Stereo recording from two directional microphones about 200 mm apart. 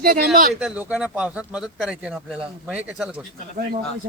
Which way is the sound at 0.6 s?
5° right (ahead or behind).